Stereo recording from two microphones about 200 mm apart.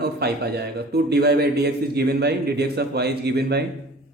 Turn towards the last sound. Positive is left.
turn(degrees=-55)  # may be behind; listen again after turning